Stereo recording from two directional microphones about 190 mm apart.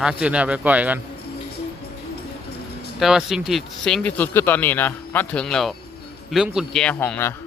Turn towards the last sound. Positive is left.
turn(degrees=10)  # may be behind; listen again after turning